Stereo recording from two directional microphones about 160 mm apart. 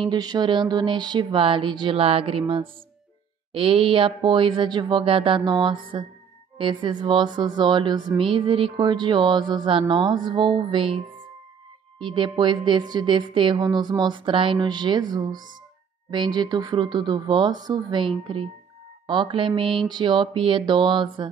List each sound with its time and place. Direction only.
0.0 s speech: 25° right (ahead or behind)
12.0 s speech: 30° right (ahead or behind)